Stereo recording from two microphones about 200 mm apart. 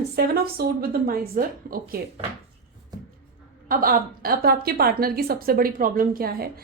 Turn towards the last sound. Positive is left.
turn(degrees=-50)  # may be behind; listen again after turning